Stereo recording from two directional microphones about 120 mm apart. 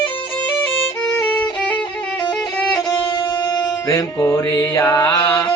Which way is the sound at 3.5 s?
30° left (ahead or behind).